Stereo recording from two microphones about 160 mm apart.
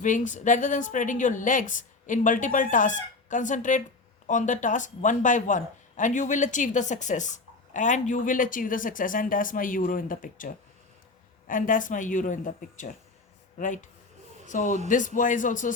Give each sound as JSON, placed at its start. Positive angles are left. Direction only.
{"t": 0.0, "sound": "a woman's voice", "side_deg": 50}
{"t": 14.4, "sound": "speech", "side_deg": 50}